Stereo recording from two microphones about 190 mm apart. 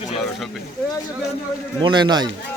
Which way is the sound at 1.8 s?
25° right (ahead or behind).